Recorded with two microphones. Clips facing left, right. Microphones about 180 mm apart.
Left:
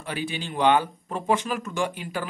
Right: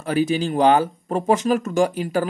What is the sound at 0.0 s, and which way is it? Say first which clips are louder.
Speech: right 11 dB; 40° right (ahead or behind).